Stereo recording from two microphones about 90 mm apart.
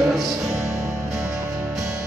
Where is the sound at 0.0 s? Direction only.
Centre (ahead or behind).